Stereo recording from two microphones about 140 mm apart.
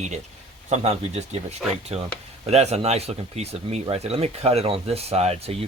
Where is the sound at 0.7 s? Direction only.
45° right (ahead or behind).